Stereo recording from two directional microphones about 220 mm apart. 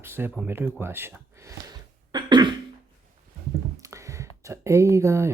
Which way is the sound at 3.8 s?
15° right (ahead or behind).